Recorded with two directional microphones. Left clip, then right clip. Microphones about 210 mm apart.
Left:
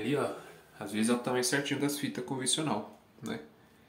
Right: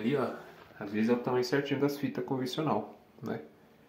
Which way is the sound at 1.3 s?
35° left (ahead or behind).